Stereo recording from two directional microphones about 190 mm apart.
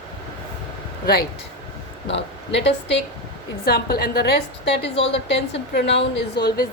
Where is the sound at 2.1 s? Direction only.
70° left (ahead or behind).